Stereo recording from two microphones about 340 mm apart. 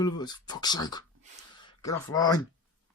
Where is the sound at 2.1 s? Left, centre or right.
Centre.